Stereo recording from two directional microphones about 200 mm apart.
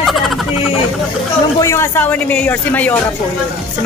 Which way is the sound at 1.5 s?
15° left (ahead or behind).